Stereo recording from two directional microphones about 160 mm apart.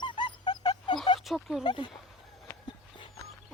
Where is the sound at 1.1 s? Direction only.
Centre (ahead or behind).